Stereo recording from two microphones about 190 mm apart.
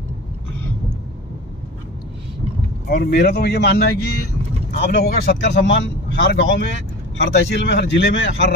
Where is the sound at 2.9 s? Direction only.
50° left (ahead or behind).